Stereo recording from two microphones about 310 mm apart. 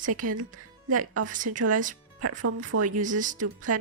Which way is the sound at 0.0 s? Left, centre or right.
Right.